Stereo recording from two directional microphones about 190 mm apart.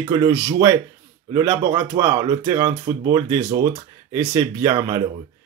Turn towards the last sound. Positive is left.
turn(degrees=-15)  # may be behind; listen again after turning